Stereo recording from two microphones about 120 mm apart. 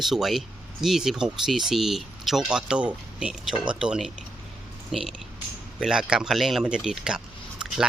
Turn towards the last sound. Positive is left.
turn(degrees=-5)  # may be behind; listen again after turning